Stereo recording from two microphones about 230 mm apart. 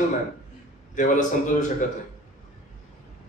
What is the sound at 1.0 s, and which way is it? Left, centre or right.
Speech, left.